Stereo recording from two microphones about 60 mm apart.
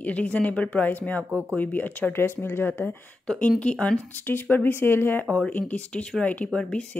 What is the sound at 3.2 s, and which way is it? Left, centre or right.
Speech, centre.